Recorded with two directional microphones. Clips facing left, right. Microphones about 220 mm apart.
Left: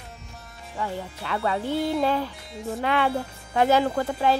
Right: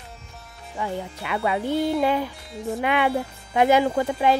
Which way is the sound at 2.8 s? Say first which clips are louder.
Right 2 dB; 15° right (ahead or behind).